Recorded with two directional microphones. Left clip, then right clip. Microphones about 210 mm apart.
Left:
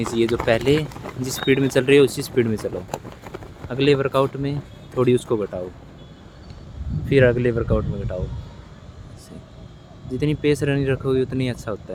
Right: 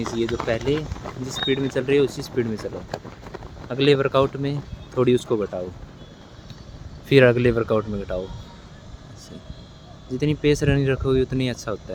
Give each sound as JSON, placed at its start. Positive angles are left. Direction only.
{"t": 0.0, "sound": "speech", "side_deg": 35}
{"t": 3.7, "sound": "speech", "side_deg": 5}
{"t": 7.1, "sound": "speech", "side_deg": -15}
{"t": 10.1, "sound": "speech", "side_deg": 0}